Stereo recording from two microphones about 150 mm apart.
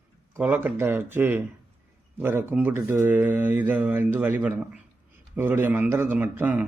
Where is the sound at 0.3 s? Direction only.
10° right (ahead or behind).